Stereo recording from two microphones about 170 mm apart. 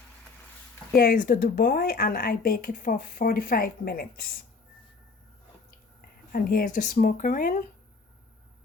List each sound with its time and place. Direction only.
0.9 s a woman's voice: 55° left (ahead or behind)
6.3 s speech: 60° left (ahead or behind)